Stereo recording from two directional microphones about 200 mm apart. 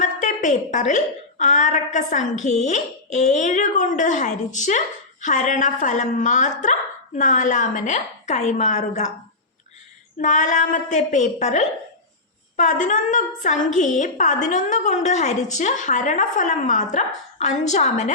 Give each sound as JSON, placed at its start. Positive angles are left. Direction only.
{"t": 0.0, "sound": "a woman's voice", "side_deg": 40}
{"t": 10.2, "sound": "a woman's voice", "side_deg": 40}